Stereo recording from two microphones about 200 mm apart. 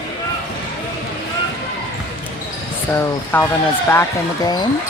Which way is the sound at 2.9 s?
10° left (ahead or behind).